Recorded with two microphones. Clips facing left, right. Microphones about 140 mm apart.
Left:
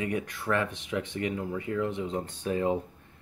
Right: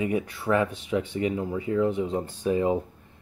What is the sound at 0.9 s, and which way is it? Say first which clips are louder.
Speech: right 5 dB; 20° right (ahead or behind).